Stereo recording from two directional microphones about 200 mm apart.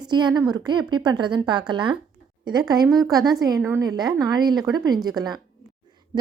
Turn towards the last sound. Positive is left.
turn(degrees=-20)  # may be behind; listen again after turning